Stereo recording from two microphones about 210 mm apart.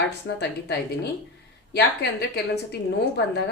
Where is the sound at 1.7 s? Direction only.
50° left (ahead or behind).